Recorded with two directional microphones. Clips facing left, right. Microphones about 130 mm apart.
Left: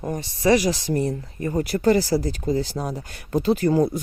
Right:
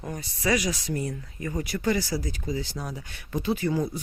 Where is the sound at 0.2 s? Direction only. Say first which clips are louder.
Left 7 dB; 25° left (ahead or behind).